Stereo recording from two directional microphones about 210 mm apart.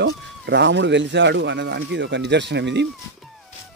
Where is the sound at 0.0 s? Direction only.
55° right (ahead or behind).